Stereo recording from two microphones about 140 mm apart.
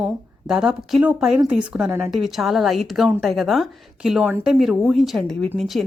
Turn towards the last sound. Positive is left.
turn(degrees=0)  # may be behind; listen again after turning